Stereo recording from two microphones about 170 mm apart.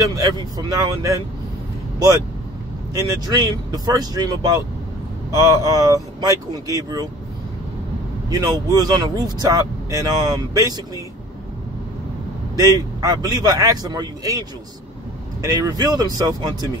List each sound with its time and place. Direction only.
0.0 s speech: 20° right (ahead or behind)
8.3 s speech: 20° right (ahead or behind)
12.5 s speech: 20° right (ahead or behind)
15.5 s speech: 20° right (ahead or behind)